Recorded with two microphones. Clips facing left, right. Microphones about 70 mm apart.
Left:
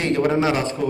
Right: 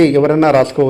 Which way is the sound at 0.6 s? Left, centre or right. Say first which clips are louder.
Right 11 dB; right.